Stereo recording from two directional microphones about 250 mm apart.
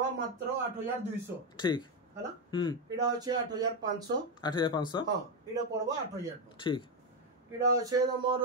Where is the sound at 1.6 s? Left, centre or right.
Centre.